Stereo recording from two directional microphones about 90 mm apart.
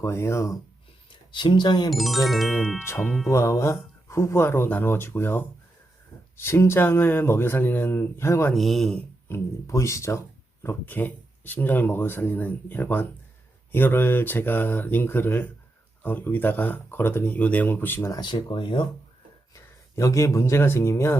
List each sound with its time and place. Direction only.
0.0 s speech: 30° left (ahead or behind)
1.3 s speech: 60° left (ahead or behind)
1.9 s music: centre (ahead or behind)
2.7 s speech: 25° left (ahead or behind)
8.5 s music: centre (ahead or behind)
9.3 s speech: 35° left (ahead or behind)
18.2 s speech: 55° left (ahead or behind)
19.5 s speech: 35° left (ahead or behind)